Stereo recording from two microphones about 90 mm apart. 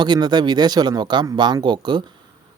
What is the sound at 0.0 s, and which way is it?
Speech, 55° right (ahead or behind).